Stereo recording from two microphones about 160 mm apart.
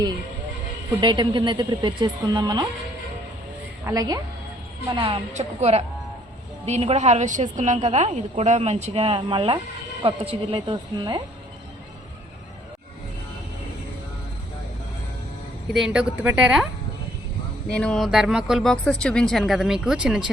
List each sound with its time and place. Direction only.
1.0 s speech: 30° right (ahead or behind)
3.8 s speech: 25° right (ahead or behind)
4.9 s speech: 35° right (ahead or behind)
5.3 s a woman's voice: 45° right (ahead or behind); by 11.2 s 25° right (ahead or behind)
15.7 s a woman's voice: 5° right (ahead or behind)
17.7 s speech: 5° left (ahead or behind)